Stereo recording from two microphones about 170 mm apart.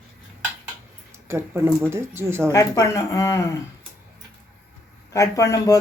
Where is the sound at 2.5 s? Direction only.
20° left (ahead or behind).